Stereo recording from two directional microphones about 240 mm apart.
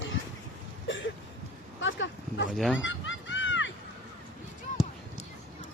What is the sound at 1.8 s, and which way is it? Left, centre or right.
Dog, left.